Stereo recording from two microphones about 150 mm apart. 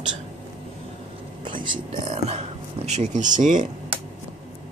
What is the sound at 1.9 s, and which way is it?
Speech, 45° right (ahead or behind).